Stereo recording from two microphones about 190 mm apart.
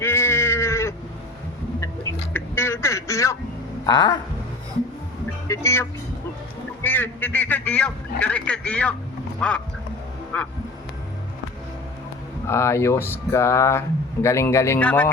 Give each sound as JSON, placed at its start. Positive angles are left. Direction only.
{"t": 0.0, "sound": "sheep", "side_deg": 15}
{"t": 2.3, "sound": "music", "side_deg": 10}
{"t": 3.8, "sound": "a sound", "side_deg": 20}
{"t": 5.5, "sound": "speech", "side_deg": 15}
{"t": 12.5, "sound": "speech", "side_deg": 15}